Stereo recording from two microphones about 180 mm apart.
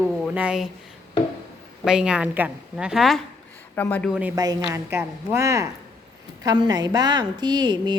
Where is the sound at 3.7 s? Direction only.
10° left (ahead or behind).